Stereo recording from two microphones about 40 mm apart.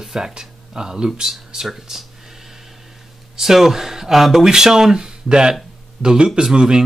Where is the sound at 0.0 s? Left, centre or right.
Centre.